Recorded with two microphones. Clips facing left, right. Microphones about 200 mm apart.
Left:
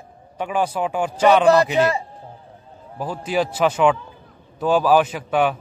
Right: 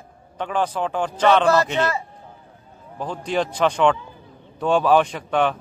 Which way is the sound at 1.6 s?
10° left (ahead or behind).